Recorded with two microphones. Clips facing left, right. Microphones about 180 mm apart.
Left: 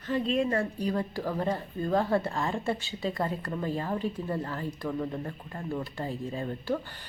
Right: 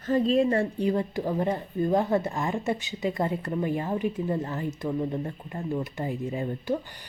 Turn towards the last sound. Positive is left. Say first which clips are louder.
# right 3 dB
turn(degrees=-20)  # may be behind; listen again after turning